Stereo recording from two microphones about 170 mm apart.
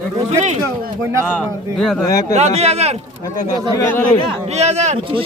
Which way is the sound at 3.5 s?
20° left (ahead or behind).